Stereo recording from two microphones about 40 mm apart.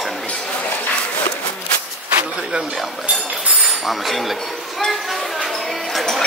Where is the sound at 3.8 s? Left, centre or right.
Centre.